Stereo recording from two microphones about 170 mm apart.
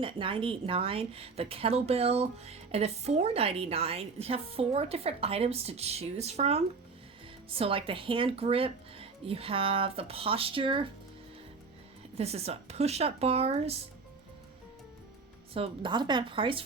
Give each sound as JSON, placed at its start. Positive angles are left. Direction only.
{"t": 0.0, "sound": "a woman's voice", "side_deg": -30}
{"t": 12.1, "sound": "a woman's voice", "side_deg": -35}
{"t": 15.5, "sound": "a woman's voice", "side_deg": -30}